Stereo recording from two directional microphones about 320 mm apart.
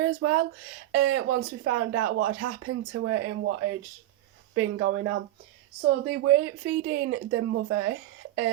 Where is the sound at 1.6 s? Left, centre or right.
Right.